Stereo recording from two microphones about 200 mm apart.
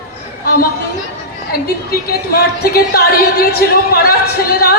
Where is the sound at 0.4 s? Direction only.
50° left (ahead or behind).